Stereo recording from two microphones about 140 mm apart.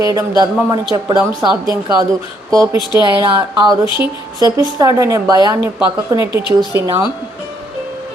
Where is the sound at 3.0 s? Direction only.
30° right (ahead or behind).